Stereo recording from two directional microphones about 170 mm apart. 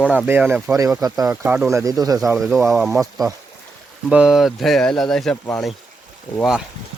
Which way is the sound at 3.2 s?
20° right (ahead or behind).